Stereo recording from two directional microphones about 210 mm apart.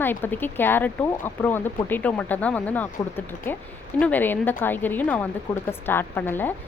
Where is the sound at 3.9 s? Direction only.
5° left (ahead or behind).